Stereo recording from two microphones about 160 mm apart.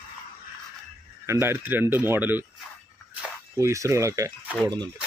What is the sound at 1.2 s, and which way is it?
Speech, 15° right (ahead or behind).